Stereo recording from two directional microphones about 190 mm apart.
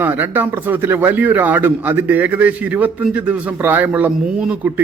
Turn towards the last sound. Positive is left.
turn(degrees=-5)  # may be behind; listen again after turning